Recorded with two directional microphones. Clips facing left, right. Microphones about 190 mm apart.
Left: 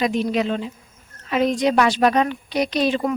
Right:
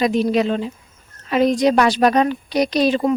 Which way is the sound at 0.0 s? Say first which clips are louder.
Right 4 dB; 35° right (ahead or behind).